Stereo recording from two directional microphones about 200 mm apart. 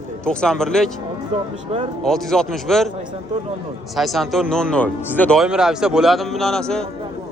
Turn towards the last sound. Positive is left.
turn(degrees=5)  # may be behind; listen again after turning